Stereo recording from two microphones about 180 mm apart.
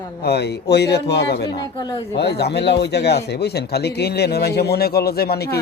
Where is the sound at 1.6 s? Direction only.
25° left (ahead or behind).